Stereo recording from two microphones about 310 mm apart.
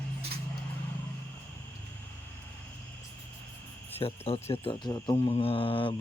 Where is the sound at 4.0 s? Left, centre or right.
Centre.